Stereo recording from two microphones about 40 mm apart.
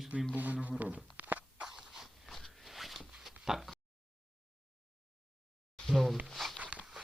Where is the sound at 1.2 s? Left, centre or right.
Right.